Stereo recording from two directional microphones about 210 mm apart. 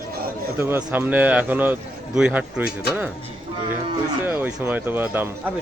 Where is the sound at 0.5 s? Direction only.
10° right (ahead or behind).